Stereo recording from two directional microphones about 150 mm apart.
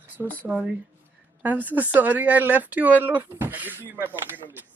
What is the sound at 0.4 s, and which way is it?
Speech, 10° right (ahead or behind).